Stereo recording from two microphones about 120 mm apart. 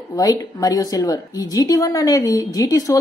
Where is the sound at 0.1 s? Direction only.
30° left (ahead or behind).